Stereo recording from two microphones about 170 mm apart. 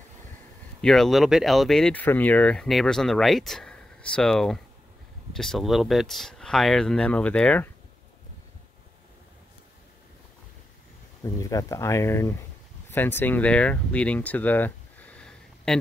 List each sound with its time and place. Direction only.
0.7 s speech: centre (ahead or behind)
11.2 s speech: 20° left (ahead or behind); by 15.8 s 5° left (ahead or behind)